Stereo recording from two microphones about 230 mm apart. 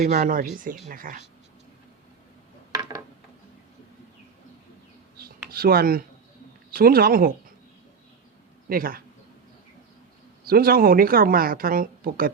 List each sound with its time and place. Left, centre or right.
0.1 s speech: right
5.5 s speech: right
8.7 s speech: right
10.4 s speech: right